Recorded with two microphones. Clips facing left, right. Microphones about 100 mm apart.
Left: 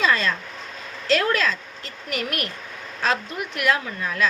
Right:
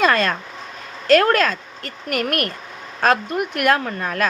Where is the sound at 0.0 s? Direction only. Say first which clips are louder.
Right 4 dB; 55° right (ahead or behind).